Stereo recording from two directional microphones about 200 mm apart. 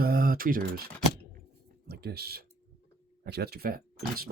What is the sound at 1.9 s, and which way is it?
Speech, 50° right (ahead or behind).